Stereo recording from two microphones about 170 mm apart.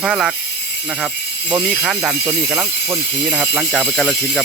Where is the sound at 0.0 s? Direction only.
5° right (ahead or behind).